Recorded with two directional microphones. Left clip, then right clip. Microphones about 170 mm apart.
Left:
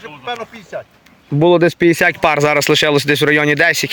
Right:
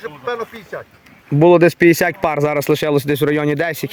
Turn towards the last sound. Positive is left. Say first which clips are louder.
# left 6 dB
turn(degrees=-10)  # may be behind; listen again after turning